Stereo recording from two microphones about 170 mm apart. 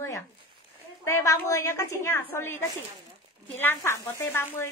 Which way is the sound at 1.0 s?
15° left (ahead or behind).